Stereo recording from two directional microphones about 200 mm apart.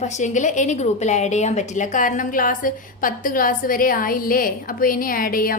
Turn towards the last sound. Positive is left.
turn(degrees=45)  # may be behind; listen again after turning